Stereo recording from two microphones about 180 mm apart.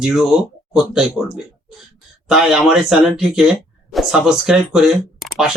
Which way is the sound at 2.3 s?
Centre (ahead or behind).